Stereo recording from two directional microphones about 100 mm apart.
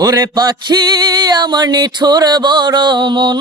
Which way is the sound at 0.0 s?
40° right (ahead or behind).